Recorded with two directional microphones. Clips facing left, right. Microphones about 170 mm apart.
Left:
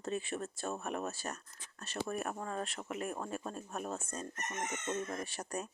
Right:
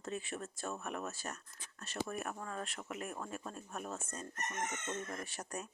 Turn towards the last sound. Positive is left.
turn(degrees=35)  # may be behind; listen again after turning